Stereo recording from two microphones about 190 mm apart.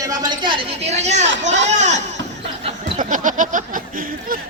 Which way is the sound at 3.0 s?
40° right (ahead or behind).